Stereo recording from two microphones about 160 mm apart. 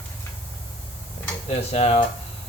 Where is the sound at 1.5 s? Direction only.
40° left (ahead or behind).